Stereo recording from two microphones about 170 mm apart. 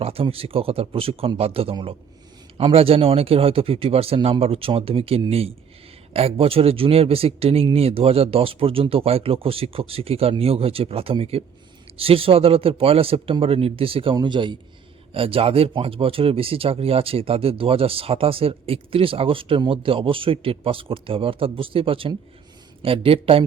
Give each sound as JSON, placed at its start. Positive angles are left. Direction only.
{"t": 0.0, "sound": "speech", "side_deg": -35}